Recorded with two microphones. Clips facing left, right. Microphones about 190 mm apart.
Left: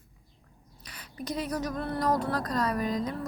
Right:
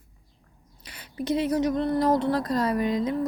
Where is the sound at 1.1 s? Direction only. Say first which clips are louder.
Right 8 dB; 25° right (ahead or behind).